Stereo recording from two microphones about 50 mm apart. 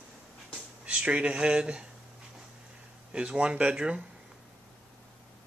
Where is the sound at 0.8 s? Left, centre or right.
Right.